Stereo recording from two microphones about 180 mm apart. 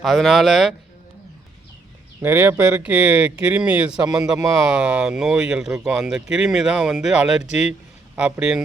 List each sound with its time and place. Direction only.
0.0 s speech: centre (ahead or behind)
2.2 s speech: 10° right (ahead or behind)
4.0 s speech: 20° right (ahead or behind)
4.7 s a man's voice: 5° right (ahead or behind)